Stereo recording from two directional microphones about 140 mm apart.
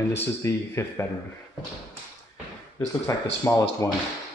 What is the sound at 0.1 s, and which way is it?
Speech, 20° left (ahead or behind).